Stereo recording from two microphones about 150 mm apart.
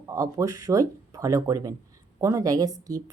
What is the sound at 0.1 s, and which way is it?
Speech, 20° right (ahead or behind).